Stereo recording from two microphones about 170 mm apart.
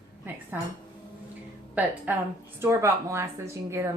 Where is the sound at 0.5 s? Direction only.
10° right (ahead or behind).